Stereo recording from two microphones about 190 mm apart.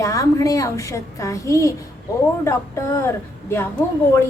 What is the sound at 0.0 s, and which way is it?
A woman's voice, 15° left (ahead or behind).